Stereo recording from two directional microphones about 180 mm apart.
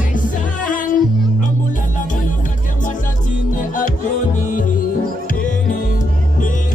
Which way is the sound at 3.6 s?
45° left (ahead or behind).